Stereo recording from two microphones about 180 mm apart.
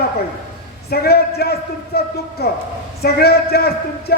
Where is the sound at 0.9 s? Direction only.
60° left (ahead or behind).